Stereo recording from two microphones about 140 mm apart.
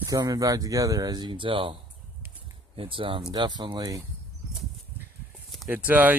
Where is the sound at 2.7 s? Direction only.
40° right (ahead or behind).